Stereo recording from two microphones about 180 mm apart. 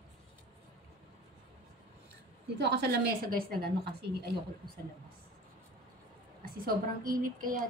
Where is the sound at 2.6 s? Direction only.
70° right (ahead or behind).